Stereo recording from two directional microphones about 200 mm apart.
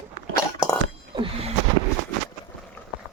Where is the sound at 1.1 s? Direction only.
25° right (ahead or behind).